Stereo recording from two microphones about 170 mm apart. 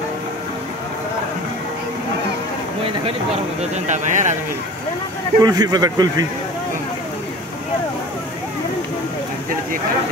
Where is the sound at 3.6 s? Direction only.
45° right (ahead or behind).